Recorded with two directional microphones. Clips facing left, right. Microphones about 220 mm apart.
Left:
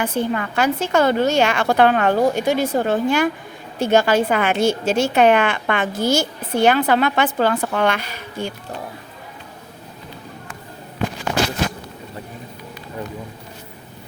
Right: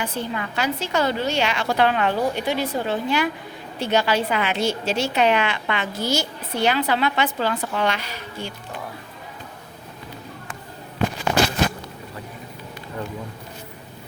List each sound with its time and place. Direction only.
0.0 s a woman's voice: 50° left (ahead or behind)